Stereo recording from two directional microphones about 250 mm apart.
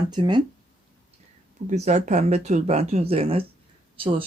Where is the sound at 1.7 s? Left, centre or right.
Right.